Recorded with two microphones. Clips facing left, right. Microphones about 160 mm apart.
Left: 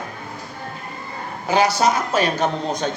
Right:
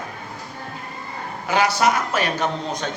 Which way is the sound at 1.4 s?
35° left (ahead or behind).